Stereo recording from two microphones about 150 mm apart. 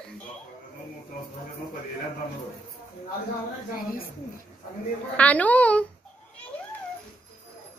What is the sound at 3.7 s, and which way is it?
Speech, 75° left (ahead or behind).